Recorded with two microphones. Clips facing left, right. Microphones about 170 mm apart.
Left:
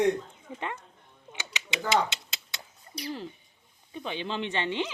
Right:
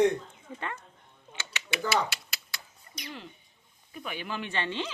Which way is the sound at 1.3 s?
20° left (ahead or behind).